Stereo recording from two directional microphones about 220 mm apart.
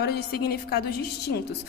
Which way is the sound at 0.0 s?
45° left (ahead or behind).